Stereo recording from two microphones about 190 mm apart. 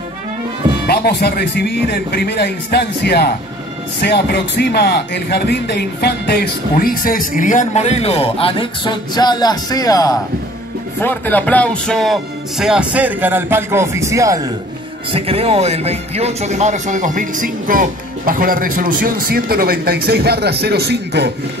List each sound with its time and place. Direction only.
0.8 s a man's voice: 55° left (ahead or behind); by 14.4 s 15° right (ahead or behind)
15.1 s speech: 30° right (ahead or behind); by 21.3 s 60° right (ahead or behind)